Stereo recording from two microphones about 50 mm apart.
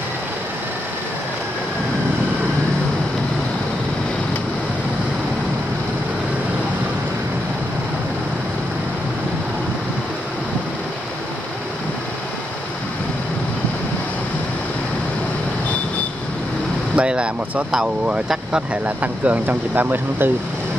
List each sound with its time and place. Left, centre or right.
16.9 s speech: right
18.9 s speech: right